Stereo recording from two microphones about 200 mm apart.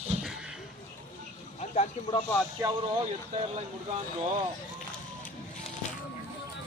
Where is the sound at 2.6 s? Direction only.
10° right (ahead or behind).